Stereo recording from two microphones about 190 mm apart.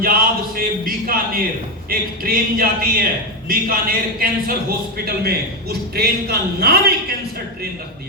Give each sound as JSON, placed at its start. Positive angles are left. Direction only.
{"t": 0.0, "sound": "a man's voice", "side_deg": -50}